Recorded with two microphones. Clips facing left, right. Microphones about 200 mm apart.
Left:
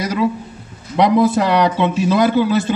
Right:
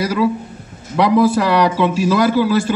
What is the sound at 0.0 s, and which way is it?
A man's voice, 20° left (ahead or behind).